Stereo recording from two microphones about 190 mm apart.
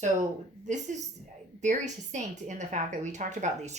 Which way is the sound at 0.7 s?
40° right (ahead or behind).